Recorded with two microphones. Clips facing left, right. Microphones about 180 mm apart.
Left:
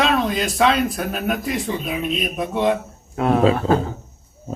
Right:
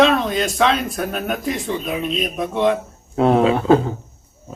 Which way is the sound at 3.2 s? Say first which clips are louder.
Right 4 dB; 25° right (ahead or behind).